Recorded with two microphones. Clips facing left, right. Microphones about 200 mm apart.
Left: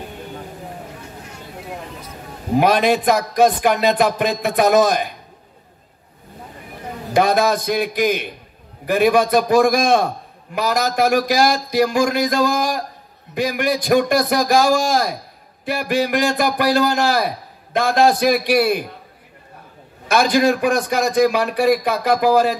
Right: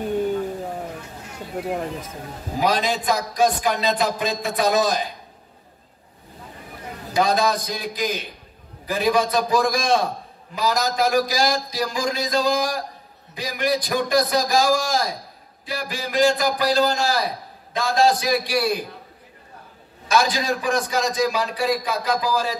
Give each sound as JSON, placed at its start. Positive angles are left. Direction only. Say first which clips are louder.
{"t": 2.5, "sound": "a man's voice", "louder": "left 7 dB", "side_deg": 60}
{"t": 7.2, "sound": "a man's voice", "louder": "left 4 dB", "side_deg": 60}
{"t": 20.1, "sound": "a man's voice", "louder": "left 6 dB", "side_deg": 60}